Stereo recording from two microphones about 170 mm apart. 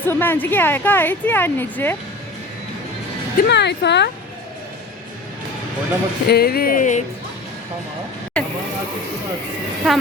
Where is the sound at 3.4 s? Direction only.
90° left.